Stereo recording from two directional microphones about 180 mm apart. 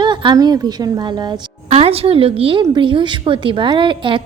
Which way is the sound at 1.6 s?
35° right (ahead or behind).